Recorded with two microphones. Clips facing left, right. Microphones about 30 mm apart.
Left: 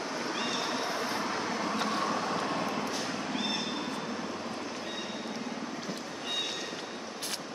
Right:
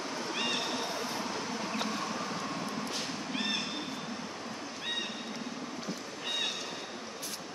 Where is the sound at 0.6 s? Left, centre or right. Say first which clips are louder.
Left 3 dB; left.